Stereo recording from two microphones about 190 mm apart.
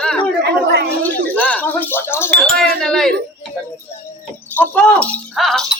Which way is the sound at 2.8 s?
5° left (ahead or behind).